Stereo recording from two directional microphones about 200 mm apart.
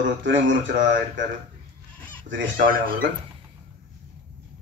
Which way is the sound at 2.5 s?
45° right (ahead or behind).